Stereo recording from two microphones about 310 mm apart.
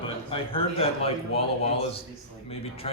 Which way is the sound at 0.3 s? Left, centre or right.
Centre.